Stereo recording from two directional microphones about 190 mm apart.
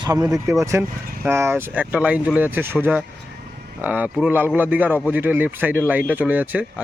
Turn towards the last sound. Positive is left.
turn(degrees=-10)  # may be behind; listen again after turning